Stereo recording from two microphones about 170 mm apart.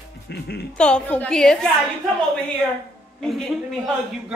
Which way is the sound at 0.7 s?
5° left (ahead or behind).